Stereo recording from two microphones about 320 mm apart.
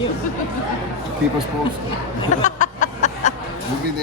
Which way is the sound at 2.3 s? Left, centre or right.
Left.